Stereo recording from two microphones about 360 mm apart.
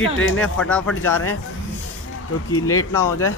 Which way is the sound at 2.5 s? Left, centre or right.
Centre.